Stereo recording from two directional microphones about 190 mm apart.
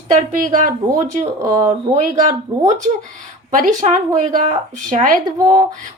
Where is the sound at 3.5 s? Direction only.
45° right (ahead or behind).